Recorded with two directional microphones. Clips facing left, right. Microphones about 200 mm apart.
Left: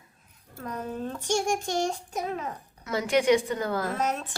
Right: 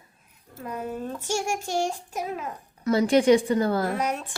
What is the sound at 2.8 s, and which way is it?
Speech, 35° right (ahead or behind).